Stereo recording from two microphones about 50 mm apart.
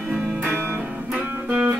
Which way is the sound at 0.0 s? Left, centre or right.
Centre.